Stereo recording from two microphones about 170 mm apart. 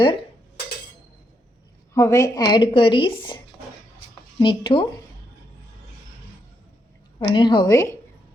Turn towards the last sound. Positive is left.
turn(degrees=20)  # may be behind; listen again after turning